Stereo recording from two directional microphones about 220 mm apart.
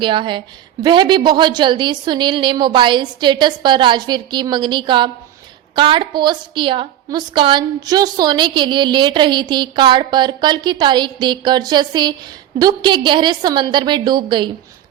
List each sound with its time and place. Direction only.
0.0 s a woman's voice: 20° right (ahead or behind)